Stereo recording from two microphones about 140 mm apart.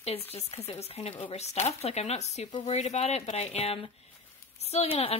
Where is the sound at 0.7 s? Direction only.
50° left (ahead or behind).